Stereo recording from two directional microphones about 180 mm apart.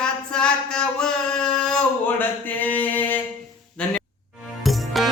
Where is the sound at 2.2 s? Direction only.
10° left (ahead or behind).